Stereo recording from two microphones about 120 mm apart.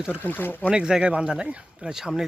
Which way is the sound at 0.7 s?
5° right (ahead or behind).